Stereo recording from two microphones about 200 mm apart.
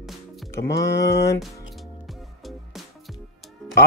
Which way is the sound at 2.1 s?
Centre (ahead or behind).